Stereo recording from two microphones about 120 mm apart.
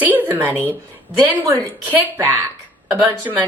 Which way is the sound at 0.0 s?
15° right (ahead or behind).